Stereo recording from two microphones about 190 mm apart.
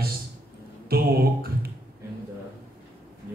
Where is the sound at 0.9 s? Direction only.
55° right (ahead or behind).